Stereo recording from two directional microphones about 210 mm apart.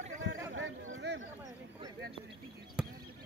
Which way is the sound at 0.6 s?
65° right (ahead or behind).